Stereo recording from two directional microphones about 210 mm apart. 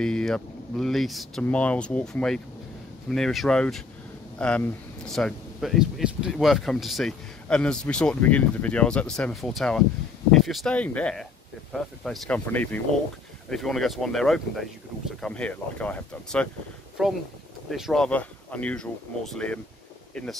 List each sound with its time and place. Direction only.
0.0 s speech: 5° left (ahead or behind)